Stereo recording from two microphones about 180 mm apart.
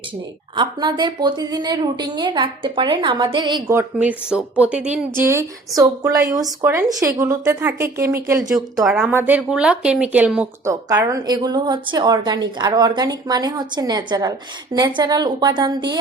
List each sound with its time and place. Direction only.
0.5 s a woman's voice: 25° right (ahead or behind)
3.7 s speech: 10° right (ahead or behind)
8.8 s speech: centre (ahead or behind)
10.7 s a woman's voice: 15° right (ahead or behind)